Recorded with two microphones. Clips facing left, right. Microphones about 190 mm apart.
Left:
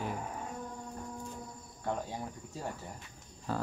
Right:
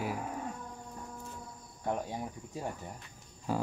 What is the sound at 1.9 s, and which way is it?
Speech, 15° right (ahead or behind).